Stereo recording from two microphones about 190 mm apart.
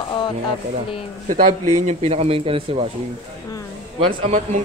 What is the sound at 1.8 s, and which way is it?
Speech, 35° right (ahead or behind).